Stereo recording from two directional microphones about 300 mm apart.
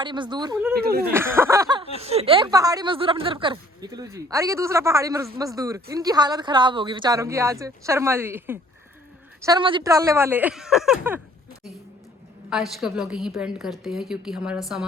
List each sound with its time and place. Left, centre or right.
0.0 s speech: centre
0.7 s speech: right
1.1 s speech: centre
12.5 s a woman's voice: centre